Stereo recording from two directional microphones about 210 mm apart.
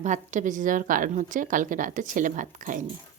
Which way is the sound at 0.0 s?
35° right (ahead or behind).